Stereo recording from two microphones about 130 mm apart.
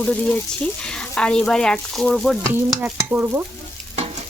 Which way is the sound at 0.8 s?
5° left (ahead or behind).